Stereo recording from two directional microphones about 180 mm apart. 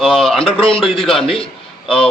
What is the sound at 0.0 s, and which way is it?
A man's voice, centre (ahead or behind).